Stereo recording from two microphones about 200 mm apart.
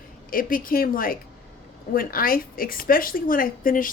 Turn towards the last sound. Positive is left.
turn(degrees=45)  # may be behind; listen again after turning